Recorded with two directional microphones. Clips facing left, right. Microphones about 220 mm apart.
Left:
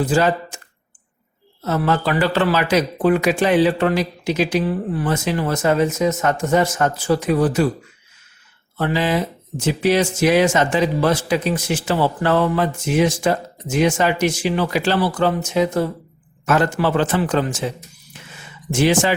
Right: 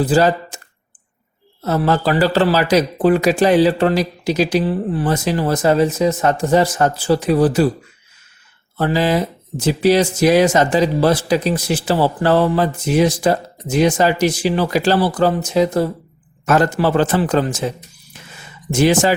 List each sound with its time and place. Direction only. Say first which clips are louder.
0.0 s speech: right 3 dB; 35° right (ahead or behind)
1.6 s speech: right 3 dB; 35° right (ahead or behind)
8.8 s speech: right 3 dB; 40° right (ahead or behind)
18.1 s a sound: right 1 dB; 40° right (ahead or behind)
18.7 s speech: right 3 dB; 40° right (ahead or behind)